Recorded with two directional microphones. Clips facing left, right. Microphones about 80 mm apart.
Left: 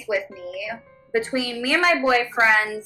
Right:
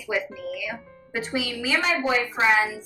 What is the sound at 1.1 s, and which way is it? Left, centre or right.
Speech, left.